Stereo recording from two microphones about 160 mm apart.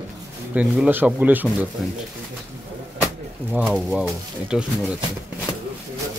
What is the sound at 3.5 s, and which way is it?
Speech, 5° right (ahead or behind).